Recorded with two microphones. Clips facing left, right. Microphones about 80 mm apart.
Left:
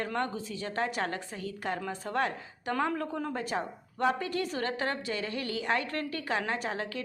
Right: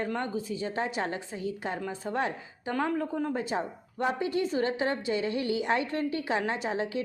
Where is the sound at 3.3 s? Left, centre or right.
Centre.